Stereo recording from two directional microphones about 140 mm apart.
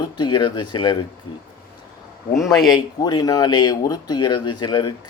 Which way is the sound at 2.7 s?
30° left (ahead or behind).